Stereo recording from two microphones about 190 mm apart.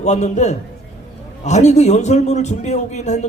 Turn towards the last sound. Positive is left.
turn(degrees=35)  # may be behind; listen again after turning